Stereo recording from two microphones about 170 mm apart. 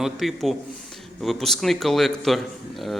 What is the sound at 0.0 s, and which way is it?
A man's voice, centre (ahead or behind).